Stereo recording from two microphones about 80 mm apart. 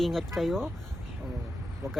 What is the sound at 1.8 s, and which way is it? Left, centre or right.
Speech, right.